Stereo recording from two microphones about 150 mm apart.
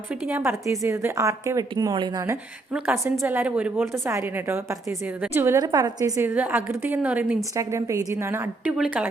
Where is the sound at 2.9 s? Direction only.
20° right (ahead or behind).